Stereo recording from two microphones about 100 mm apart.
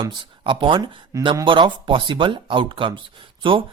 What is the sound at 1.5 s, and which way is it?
Speech, 55° right (ahead or behind).